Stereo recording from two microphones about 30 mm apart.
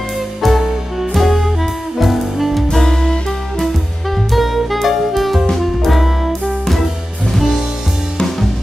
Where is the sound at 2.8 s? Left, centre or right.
Centre.